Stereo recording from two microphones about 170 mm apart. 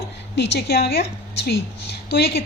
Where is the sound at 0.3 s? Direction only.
80° left.